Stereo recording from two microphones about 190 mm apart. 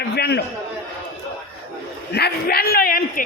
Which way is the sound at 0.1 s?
60° left (ahead or behind).